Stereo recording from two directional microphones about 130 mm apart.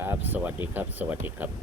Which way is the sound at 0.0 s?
15° right (ahead or behind).